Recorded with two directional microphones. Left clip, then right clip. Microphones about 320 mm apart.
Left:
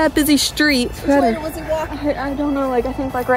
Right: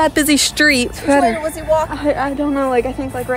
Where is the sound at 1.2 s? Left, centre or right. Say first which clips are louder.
Right 2 dB; right.